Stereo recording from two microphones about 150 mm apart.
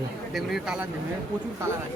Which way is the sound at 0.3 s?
5° right (ahead or behind).